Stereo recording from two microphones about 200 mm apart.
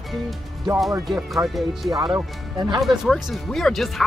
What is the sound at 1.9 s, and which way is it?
Speech, 20° right (ahead or behind).